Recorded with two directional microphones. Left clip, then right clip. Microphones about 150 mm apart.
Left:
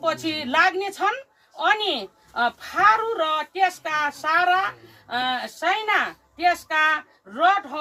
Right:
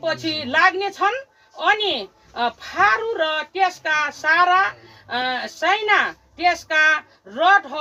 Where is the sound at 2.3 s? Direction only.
Centre (ahead or behind).